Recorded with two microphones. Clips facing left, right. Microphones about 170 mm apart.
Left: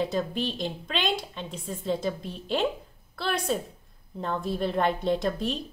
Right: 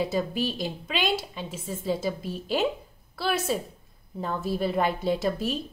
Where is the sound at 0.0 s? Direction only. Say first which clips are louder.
Right 1 dB; 5° right (ahead or behind).